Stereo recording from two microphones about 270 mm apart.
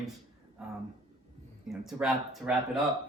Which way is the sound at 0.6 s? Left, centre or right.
Centre.